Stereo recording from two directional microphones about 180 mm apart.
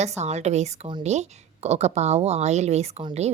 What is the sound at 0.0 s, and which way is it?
A woman's voice, 40° right (ahead or behind).